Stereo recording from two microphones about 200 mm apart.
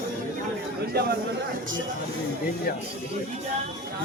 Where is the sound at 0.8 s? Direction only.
50° right (ahead or behind).